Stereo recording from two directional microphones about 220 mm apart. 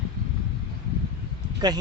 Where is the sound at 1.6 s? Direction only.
20° right (ahead or behind).